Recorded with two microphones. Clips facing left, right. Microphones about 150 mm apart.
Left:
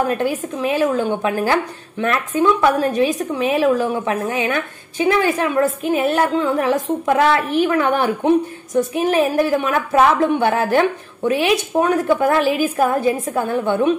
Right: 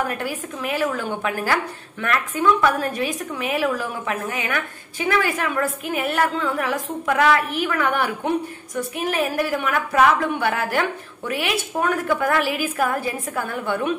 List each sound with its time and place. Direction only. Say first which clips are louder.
0.1 s speech: left 8 dB; 25° left (ahead or behind)